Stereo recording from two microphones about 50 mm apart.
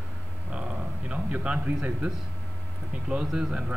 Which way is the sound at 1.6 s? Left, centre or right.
Right.